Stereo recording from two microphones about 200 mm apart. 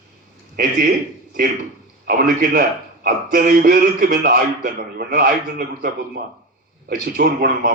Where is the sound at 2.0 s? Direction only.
45° right (ahead or behind).